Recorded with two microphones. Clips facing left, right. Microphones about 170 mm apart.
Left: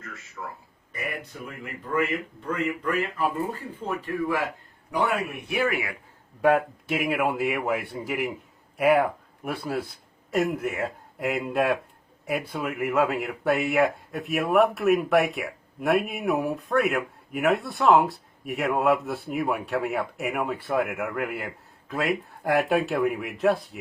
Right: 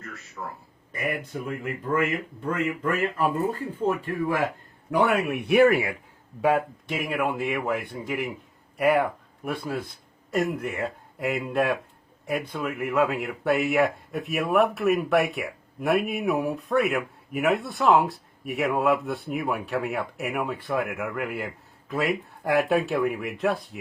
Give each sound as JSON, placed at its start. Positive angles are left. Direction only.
{"t": 0.9, "sound": "speech", "side_deg": -45}
{"t": 4.9, "sound": "a man's voice", "side_deg": -65}
{"t": 6.4, "sound": "speech", "side_deg": 0}